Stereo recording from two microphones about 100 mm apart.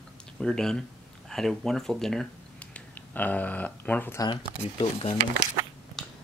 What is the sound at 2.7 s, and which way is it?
Speech, 15° left (ahead or behind).